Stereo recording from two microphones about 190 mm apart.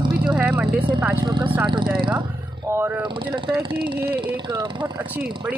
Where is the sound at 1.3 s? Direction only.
25° right (ahead or behind).